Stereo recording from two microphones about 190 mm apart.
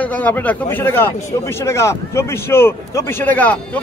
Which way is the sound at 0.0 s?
10° left (ahead or behind).